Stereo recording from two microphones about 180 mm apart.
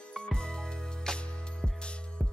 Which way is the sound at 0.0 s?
5° left (ahead or behind).